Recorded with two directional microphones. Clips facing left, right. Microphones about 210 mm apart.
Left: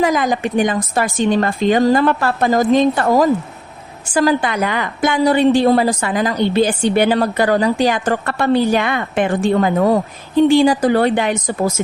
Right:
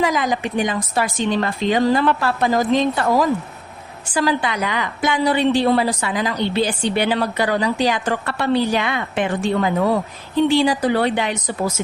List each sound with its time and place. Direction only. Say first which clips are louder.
0.0 s a woman's voice: left 4 dB; 50° left (ahead or behind)